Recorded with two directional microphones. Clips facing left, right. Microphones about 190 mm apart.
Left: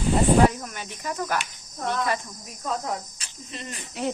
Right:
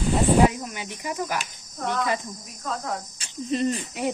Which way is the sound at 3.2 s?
35° right (ahead or behind).